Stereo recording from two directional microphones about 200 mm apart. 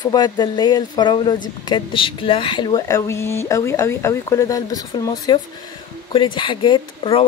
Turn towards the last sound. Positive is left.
turn(degrees=25)  # may be behind; listen again after turning